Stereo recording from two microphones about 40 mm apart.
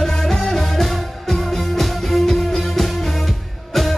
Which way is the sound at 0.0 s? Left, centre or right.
Centre.